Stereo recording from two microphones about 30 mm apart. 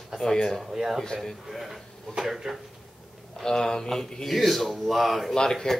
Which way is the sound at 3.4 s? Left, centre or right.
Left.